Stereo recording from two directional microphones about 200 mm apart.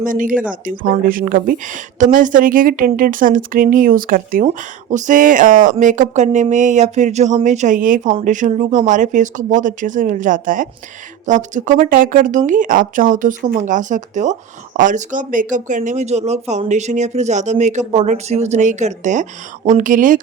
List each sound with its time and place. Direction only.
0.0 s speech: 40° right (ahead or behind)